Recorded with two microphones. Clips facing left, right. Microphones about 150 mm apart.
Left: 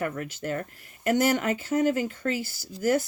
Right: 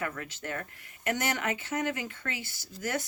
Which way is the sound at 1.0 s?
35° left (ahead or behind).